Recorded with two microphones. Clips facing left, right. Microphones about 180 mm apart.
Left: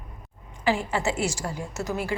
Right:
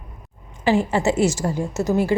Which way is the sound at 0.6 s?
25° right (ahead or behind).